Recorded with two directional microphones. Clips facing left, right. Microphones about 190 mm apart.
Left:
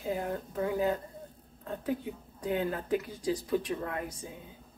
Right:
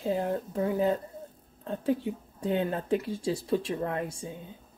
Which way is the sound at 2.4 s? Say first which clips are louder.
Right 3 dB; 30° right (ahead or behind).